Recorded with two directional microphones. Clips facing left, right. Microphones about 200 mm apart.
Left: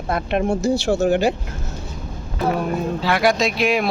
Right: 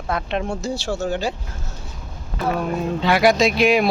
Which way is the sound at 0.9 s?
60° left (ahead or behind).